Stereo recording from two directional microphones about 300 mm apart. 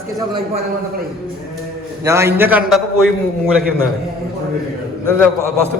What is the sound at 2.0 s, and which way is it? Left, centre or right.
Speech, centre.